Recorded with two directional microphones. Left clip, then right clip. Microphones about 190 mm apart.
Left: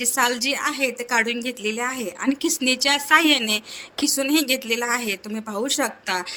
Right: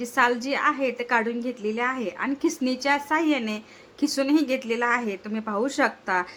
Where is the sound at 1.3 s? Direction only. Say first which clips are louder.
Left 3 dB; 50° left (ahead or behind).